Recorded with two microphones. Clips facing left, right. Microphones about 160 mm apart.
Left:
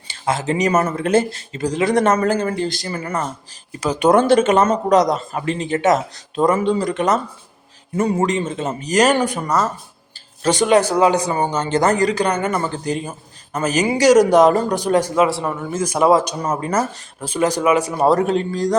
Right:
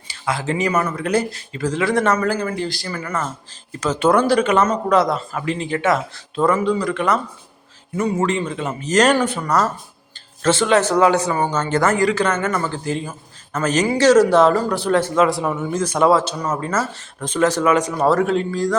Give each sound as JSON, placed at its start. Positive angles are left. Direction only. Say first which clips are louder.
{"t": 0.1, "sound": "speech", "louder": "left 2 dB", "side_deg": 25}
{"t": 0.7, "sound": "speech", "louder": "left 4 dB", "side_deg": 45}
{"t": 0.9, "sound": "speech", "louder": "left 3 dB", "side_deg": 25}
{"t": 3.5, "sound": "speech", "louder": "even", "side_deg": 10}
{"t": 5.4, "sound": "speech", "louder": "left 1 dB", "side_deg": 40}
{"t": 5.6, "sound": "speech", "louder": "left 3 dB", "side_deg": 20}
{"t": 8.9, "sound": "speech", "louder": "even", "side_deg": 10}
{"t": 15.4, "sound": "a man's voice", "louder": "right 2 dB", "side_deg": 0}
{"t": 15.8, "sound": "speech", "louder": "left 1 dB", "side_deg": 10}
{"t": 18.0, "sound": "speech", "louder": "left 2 dB", "side_deg": 20}